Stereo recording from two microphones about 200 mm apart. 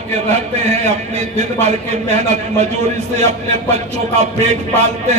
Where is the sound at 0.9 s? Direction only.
35° right (ahead or behind).